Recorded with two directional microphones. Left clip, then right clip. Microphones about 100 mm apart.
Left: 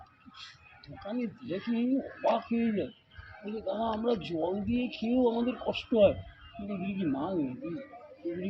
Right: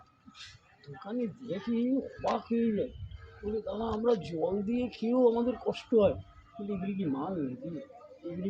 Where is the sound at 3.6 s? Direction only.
45° right (ahead or behind).